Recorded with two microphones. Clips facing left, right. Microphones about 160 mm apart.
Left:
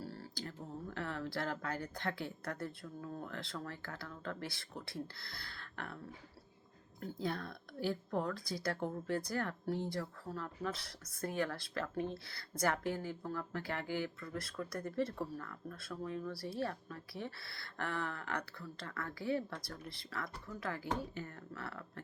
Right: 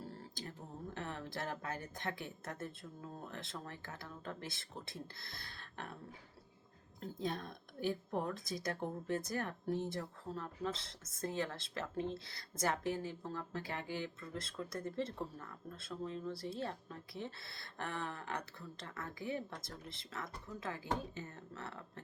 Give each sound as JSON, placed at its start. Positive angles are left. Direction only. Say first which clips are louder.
{"t": 0.0, "sound": "a sound", "louder": "left 2 dB", "side_deg": -25}
{"t": 3.2, "sound": "speech", "louder": "left 3 dB", "side_deg": -20}
{"t": 7.0, "sound": "speech", "louder": "left 1 dB", "side_deg": -20}